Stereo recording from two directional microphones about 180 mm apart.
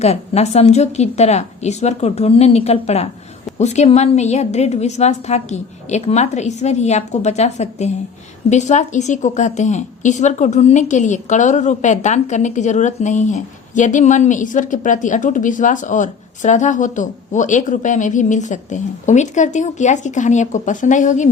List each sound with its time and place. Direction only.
0.0 s a woman's voice: 35° left (ahead or behind)